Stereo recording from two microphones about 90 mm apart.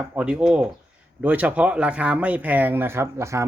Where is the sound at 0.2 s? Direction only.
10° right (ahead or behind).